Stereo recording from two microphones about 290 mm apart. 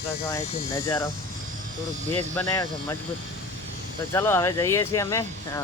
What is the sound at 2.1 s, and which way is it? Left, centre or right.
Speech, centre.